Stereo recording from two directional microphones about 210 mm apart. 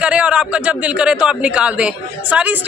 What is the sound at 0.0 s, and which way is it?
A woman's voice, 5° right (ahead or behind).